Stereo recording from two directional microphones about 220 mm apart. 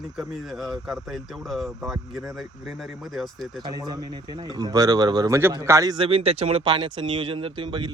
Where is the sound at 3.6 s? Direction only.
20° right (ahead or behind).